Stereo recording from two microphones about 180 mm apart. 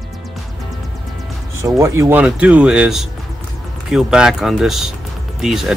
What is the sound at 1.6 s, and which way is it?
Speech, 15° right (ahead or behind).